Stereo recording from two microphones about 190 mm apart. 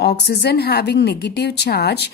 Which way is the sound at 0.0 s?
60° left (ahead or behind).